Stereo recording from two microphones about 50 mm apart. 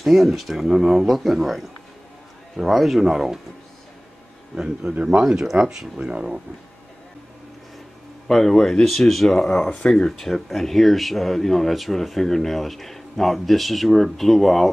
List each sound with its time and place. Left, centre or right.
0.0 s speech: centre
4.6 s speech: right
5.2 s speech: centre
5.9 s speech: right
8.3 s speech: centre